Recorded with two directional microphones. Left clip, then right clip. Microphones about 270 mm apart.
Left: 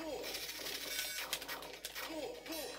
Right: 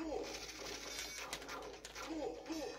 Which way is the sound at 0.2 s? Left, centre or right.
Centre.